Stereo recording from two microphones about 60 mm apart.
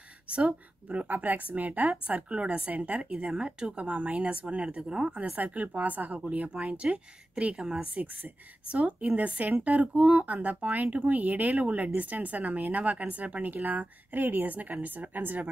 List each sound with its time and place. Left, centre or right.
0.3 s speech: centre
5.2 s speech: right